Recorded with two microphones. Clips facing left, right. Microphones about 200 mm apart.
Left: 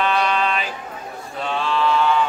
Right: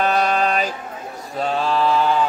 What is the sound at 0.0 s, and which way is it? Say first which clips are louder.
Music: right 2 dB; 40° right (ahead or behind).